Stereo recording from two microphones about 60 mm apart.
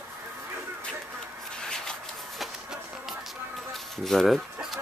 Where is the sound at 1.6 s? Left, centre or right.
Centre.